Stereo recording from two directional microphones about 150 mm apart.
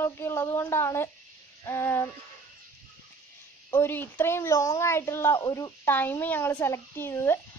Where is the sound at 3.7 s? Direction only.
15° left (ahead or behind).